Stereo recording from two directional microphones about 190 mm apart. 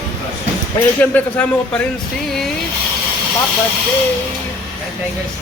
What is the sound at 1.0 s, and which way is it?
Speech, 10° left (ahead or behind).